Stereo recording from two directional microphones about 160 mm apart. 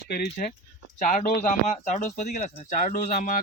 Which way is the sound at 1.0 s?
55° left (ahead or behind).